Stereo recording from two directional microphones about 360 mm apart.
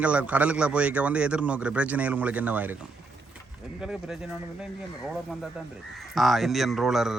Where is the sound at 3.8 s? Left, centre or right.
Centre.